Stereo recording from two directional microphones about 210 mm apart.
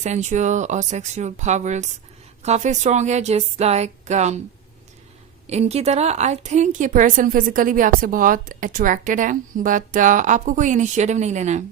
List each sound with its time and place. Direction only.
0.0 s a woman's voice: 35° right (ahead or behind)
5.5 s a woman's voice: 30° right (ahead or behind)